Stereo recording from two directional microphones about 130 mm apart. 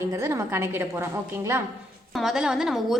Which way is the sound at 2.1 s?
Centre (ahead or behind).